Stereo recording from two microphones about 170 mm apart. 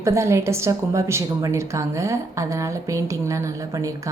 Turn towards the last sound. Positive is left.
turn(degrees=-20)  # may be behind; listen again after turning